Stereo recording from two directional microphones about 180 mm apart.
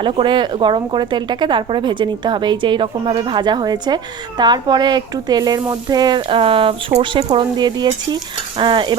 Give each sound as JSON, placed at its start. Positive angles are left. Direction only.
{"t": 0.0, "sound": "speech", "side_deg": -25}